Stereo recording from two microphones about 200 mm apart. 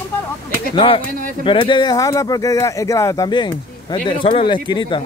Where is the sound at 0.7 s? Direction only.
25° left (ahead or behind).